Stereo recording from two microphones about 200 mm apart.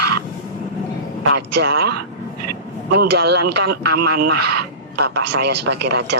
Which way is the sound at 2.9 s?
55° right (ahead or behind).